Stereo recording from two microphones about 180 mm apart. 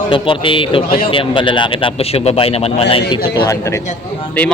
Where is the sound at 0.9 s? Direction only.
55° left (ahead or behind).